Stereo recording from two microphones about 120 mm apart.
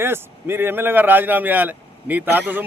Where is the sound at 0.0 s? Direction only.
20° right (ahead or behind).